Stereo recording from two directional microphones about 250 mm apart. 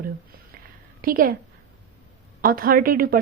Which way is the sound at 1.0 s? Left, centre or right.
Right.